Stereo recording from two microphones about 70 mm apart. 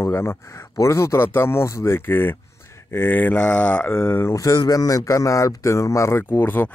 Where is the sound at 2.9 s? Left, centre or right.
Left.